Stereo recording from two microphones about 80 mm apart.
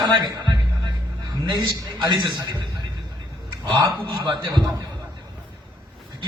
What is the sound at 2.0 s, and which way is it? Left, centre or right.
Speech, right.